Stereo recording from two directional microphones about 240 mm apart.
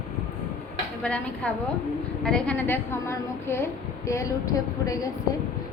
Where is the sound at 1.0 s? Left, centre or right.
Centre.